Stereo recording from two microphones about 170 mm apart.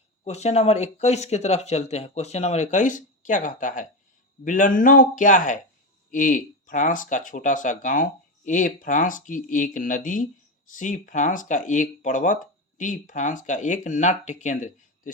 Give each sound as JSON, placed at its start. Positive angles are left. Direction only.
{"t": 0.3, "sound": "speech", "side_deg": 40}